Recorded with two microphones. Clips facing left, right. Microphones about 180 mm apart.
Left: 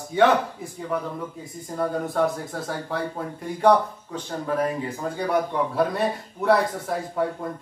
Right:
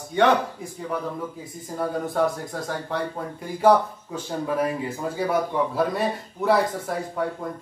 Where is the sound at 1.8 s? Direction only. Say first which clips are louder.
Even; centre (ahead or behind).